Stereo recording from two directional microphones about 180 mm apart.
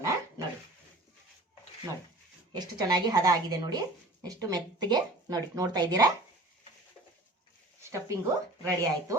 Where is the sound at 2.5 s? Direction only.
25° right (ahead or behind).